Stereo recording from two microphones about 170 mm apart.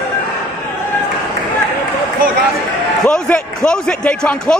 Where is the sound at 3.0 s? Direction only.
5° left (ahead or behind).